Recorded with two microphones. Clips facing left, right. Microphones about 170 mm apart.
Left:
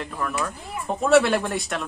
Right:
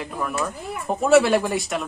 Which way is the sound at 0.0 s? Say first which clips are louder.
Right 1 dB; 5° right (ahead or behind).